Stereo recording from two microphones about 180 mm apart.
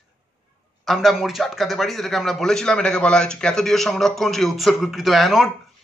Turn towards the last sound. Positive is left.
turn(degrees=0)  # may be behind; listen again after turning